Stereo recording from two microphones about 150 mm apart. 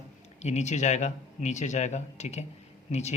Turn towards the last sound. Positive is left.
turn(degrees=50)  # may be behind; listen again after turning